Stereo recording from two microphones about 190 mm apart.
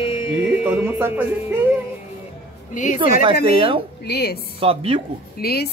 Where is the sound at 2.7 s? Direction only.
40° left (ahead or behind).